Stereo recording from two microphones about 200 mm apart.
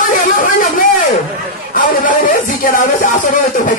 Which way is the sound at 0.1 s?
45° left (ahead or behind).